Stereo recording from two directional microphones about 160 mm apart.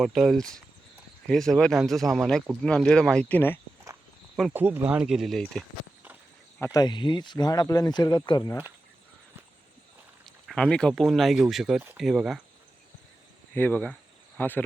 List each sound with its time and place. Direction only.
0.0 s speech: centre (ahead or behind)
4.5 s speech: 15° right (ahead or behind); by 5.6 s 5° left (ahead or behind)
6.7 s speech: 30° left (ahead or behind)
10.2 s speech: 5° left (ahead or behind)
13.5 s speech: 10° left (ahead or behind)